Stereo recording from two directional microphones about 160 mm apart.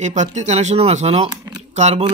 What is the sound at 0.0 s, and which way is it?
Speech, 45° right (ahead or behind).